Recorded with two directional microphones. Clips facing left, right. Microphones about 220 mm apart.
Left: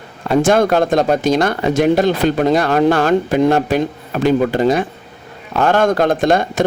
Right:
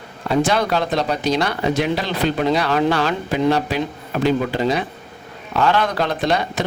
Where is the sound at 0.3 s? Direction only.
50° left (ahead or behind).